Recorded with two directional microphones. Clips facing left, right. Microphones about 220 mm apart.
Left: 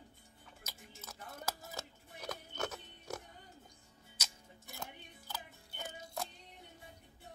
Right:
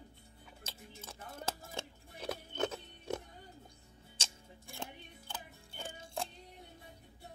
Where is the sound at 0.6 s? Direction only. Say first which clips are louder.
Right 3 dB; 30° right (ahead or behind).